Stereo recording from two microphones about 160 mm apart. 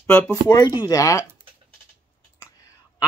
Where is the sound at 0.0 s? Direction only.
15° left (ahead or behind).